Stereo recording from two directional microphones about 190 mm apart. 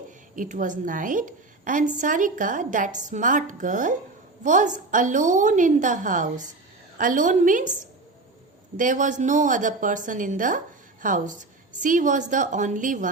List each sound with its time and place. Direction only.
0.3 s a woman's voice: 40° right (ahead or behind)